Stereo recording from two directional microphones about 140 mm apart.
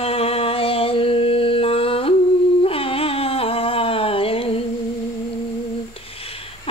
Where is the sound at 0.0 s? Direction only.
45° left (ahead or behind).